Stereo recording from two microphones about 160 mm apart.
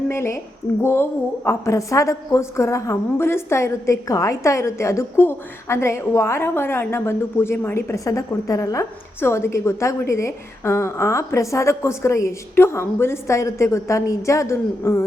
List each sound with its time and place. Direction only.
0.1 s a woman's voice: 15° left (ahead or behind)